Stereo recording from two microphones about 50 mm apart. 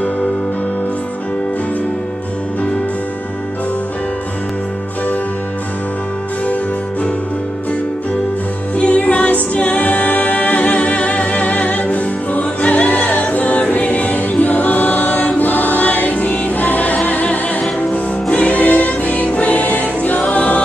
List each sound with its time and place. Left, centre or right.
8.7 s music: left